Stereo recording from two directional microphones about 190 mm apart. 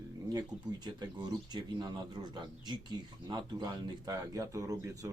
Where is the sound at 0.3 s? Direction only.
20° right (ahead or behind).